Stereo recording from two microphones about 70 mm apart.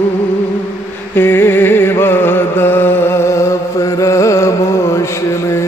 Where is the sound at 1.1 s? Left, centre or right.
Left.